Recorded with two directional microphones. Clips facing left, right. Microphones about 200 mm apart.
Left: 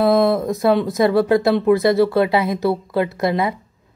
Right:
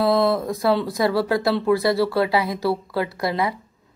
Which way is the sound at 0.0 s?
20° left (ahead or behind).